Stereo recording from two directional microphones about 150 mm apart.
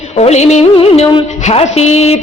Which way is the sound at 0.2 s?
45° left (ahead or behind).